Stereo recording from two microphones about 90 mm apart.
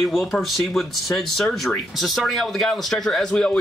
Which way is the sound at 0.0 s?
Centre (ahead or behind).